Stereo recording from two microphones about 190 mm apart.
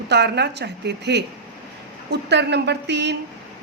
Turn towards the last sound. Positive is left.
turn(degrees=-65)  # may be behind; listen again after turning